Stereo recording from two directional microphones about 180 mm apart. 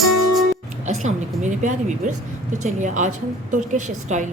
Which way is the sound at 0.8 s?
40° right (ahead or behind).